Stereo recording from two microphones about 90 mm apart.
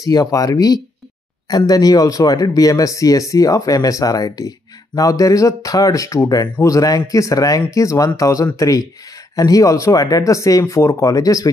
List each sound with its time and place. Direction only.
0.0 s speech: 40° left (ahead or behind)